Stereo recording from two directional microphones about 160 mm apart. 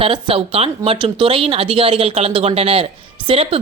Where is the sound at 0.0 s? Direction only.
35° right (ahead or behind).